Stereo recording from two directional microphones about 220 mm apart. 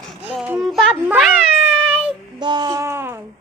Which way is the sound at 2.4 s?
20° right (ahead or behind).